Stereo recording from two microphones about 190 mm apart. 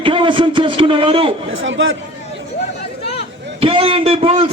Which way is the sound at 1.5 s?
90° right.